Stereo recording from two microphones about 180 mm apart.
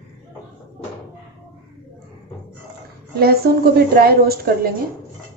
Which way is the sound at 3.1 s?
60° right (ahead or behind).